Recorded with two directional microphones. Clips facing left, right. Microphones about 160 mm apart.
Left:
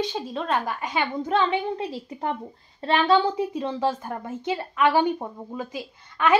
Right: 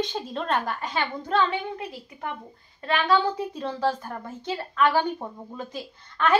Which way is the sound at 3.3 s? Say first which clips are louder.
Left 4 dB; 20° left (ahead or behind).